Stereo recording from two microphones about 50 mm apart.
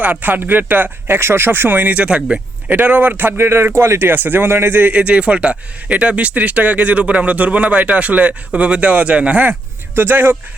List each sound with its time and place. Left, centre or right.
0.0 s speech: right
2.0 s speech: centre
2.6 s speech: right
3.3 s a man's voice: right
4.9 s speech: right